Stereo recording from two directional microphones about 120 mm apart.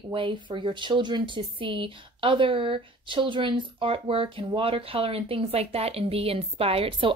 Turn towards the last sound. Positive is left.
turn(degrees=-45)  # may be behind; listen again after turning